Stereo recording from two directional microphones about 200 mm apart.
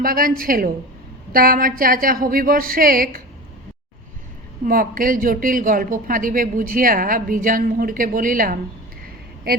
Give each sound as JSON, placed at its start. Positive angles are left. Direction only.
{"t": 0.0, "sound": "speech", "side_deg": -45}
{"t": 4.6, "sound": "speech", "side_deg": -45}